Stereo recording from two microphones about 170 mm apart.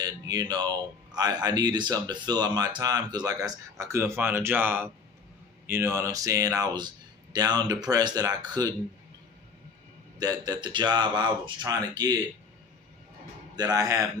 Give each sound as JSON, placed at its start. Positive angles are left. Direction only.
{"t": 0.0, "sound": "speech", "side_deg": -25}
{"t": 10.2, "sound": "speech", "side_deg": -20}
{"t": 13.6, "sound": "speech", "side_deg": -20}